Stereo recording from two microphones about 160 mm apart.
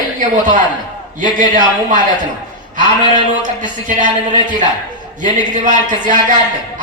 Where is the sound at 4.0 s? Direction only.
50° right (ahead or behind).